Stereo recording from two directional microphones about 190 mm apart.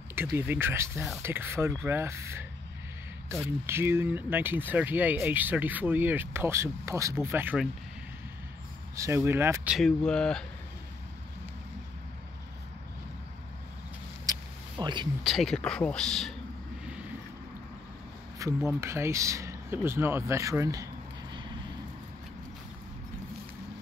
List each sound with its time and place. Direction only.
0.1 s speech: 10° right (ahead or behind)
8.9 s speech: 15° right (ahead or behind)
9.8 s speech: 5° left (ahead or behind)
14.2 s a sound: 20° right (ahead or behind)
15.2 s speech: centre (ahead or behind)
18.4 s speech: 15° right (ahead or behind)